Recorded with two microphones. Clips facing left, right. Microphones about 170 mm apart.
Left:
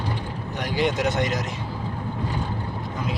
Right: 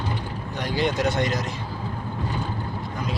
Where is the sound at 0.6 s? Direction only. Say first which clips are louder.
Even; 15° left (ahead or behind).